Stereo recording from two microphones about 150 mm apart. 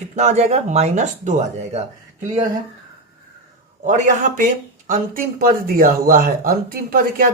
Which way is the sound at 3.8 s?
55° right (ahead or behind).